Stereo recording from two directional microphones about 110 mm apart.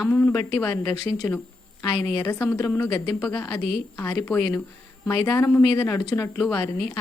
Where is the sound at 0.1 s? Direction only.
20° left (ahead or behind).